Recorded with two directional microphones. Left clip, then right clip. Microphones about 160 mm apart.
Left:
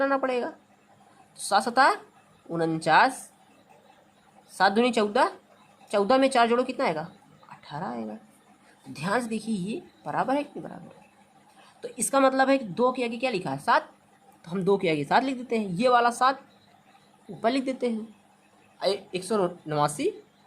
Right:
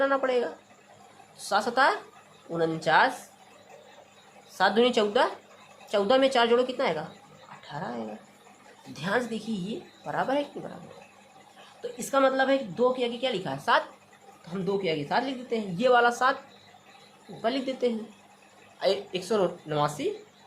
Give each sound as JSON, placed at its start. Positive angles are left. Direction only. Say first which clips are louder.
{"t": 0.0, "sound": "a woman's voice", "louder": "right 1 dB", "side_deg": 25}
{"t": 4.5, "sound": "a woman's voice", "louder": "even", "side_deg": 25}
{"t": 11.8, "sound": "a woman's voice", "louder": "left 1 dB", "side_deg": 30}
{"t": 14.5, "sound": "a woman's voice", "louder": "left 4 dB", "side_deg": 45}
{"t": 17.4, "sound": "a woman's voice", "louder": "left 1 dB", "side_deg": 40}